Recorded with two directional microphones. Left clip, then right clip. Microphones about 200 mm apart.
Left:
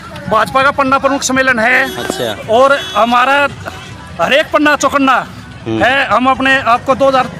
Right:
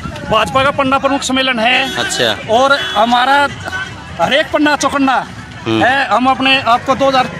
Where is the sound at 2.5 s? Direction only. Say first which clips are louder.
Left 3 dB; 30° left (ahead or behind).